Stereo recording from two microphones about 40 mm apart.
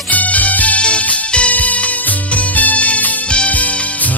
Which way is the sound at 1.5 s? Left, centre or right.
Left.